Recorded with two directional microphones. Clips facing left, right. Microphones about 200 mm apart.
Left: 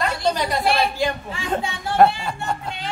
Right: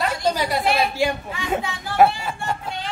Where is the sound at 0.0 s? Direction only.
5° right (ahead or behind).